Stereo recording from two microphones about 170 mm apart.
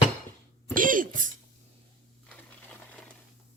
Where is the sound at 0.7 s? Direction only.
50° right (ahead or behind).